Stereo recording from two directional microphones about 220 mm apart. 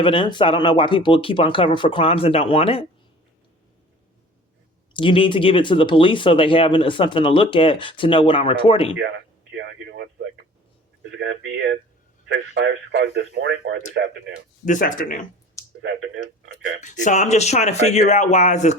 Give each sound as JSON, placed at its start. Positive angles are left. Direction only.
{"t": 0.0, "sound": "speech", "side_deg": 20}
{"t": 4.9, "sound": "speech", "side_deg": 25}
{"t": 9.0, "sound": "a sound", "side_deg": -55}
{"t": 11.1, "sound": "speech", "side_deg": -55}
{"t": 14.6, "sound": "speech", "side_deg": 35}
{"t": 15.8, "sound": "speech", "side_deg": -55}
{"t": 16.8, "sound": "speech", "side_deg": 35}